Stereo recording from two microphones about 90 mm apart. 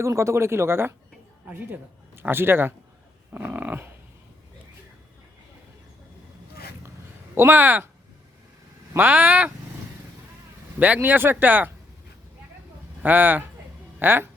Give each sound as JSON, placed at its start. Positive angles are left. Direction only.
{"t": 0.0, "sound": "a man's voice", "side_deg": -30}
{"t": 3.3, "sound": "dog", "side_deg": -15}
{"t": 7.3, "sound": "a man's voice", "side_deg": -25}
{"t": 8.9, "sound": "a man's voice", "side_deg": -20}
{"t": 10.8, "sound": "a man's voice", "side_deg": -20}
{"t": 13.0, "sound": "a man's voice", "side_deg": -20}